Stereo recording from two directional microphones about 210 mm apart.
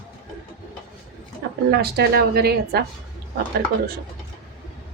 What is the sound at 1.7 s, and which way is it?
Speech, 50° right (ahead or behind).